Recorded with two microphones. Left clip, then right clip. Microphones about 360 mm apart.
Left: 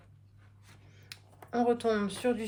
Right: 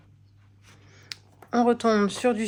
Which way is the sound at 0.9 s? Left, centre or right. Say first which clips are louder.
Right 9 dB; centre.